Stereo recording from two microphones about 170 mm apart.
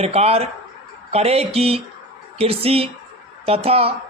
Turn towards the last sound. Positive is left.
turn(degrees=-35)  # may be behind; listen again after turning